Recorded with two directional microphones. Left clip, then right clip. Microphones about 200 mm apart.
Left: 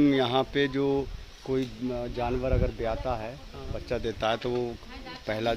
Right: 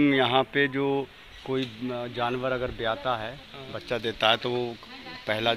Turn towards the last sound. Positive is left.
turn(degrees=0)  # may be behind; listen again after turning